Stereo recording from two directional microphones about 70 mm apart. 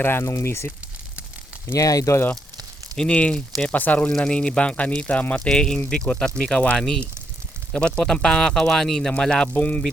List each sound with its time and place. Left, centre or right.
0.0 s speech: left
1.7 s speech: left
2.9 s speech: centre
4.1 s speech: centre
9.6 s speech: left